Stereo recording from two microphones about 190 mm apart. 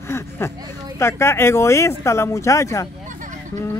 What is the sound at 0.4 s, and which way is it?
Speech, 10° left (ahead or behind).